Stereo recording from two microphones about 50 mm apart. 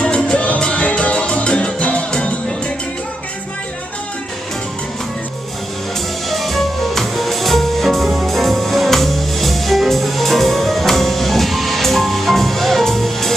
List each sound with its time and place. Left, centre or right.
0.0 s music: left
6.3 s music: centre